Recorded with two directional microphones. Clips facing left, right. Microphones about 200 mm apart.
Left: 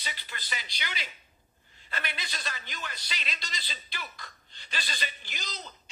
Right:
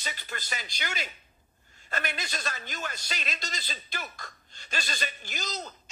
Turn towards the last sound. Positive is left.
turn(degrees=-45)  # may be behind; listen again after turning